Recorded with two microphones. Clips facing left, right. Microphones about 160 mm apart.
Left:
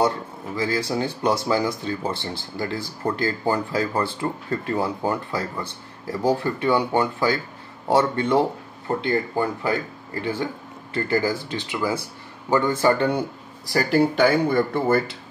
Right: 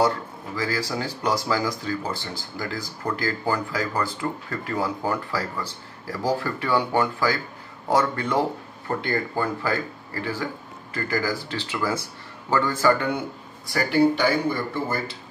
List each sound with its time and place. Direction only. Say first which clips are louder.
0.6 s speech: left 3 dB; 25° left (ahead or behind)
13.7 s speech: left 1 dB; 40° left (ahead or behind); by 15.0 s 60° left (ahead or behind)